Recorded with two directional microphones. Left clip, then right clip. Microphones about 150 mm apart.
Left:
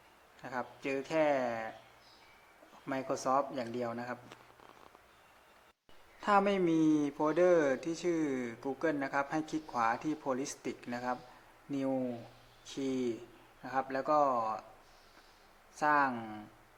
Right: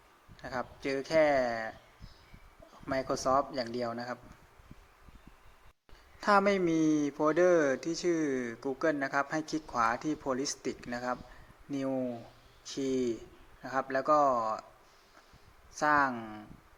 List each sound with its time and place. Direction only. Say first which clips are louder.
0.4 s speech: right 2 dB; 15° right (ahead or behind)
2.9 s speech: right 3 dB; 15° right (ahead or behind)
6.1 s a man's voice: right 3 dB; 20° right (ahead or behind)
15.8 s speech: right 2 dB; 15° right (ahead or behind)
16.1 s speech: right 1 dB; centre (ahead or behind)